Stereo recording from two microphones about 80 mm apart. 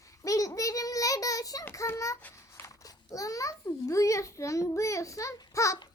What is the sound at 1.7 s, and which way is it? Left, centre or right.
Speech, left.